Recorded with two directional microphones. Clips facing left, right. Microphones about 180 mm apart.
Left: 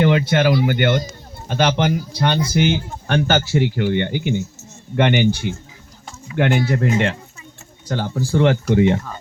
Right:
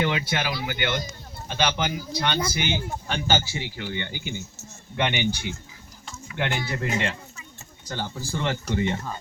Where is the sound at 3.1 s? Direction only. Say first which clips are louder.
Left 8 dB; 65° left (ahead or behind).